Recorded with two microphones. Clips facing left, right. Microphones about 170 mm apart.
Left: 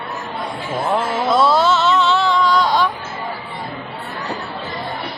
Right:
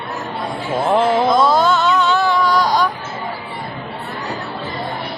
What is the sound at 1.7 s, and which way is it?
Music, centre (ahead or behind).